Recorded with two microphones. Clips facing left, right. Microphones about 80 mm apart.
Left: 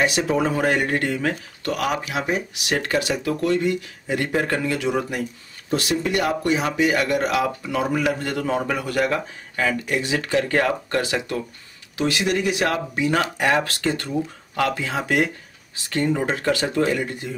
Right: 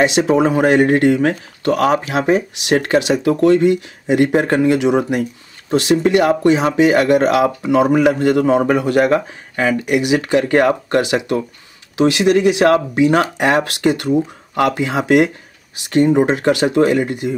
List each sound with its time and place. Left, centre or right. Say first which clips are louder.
0.0 s speech: right 7 dB; right
2.7 s speech: right 8 dB; right
3.3 s speech: right 10 dB; right